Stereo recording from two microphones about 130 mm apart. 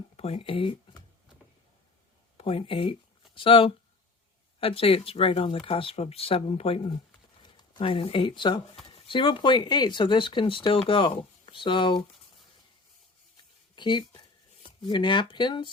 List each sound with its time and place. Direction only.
0.2 s speech: 45° left (ahead or behind)
2.4 s speech: 45° left (ahead or behind)
7.4 s speech: 35° left (ahead or behind)
13.7 s speech: 35° left (ahead or behind)